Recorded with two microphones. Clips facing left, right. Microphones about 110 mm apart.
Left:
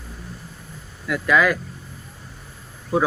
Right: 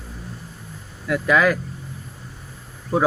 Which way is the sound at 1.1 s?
20° right (ahead or behind).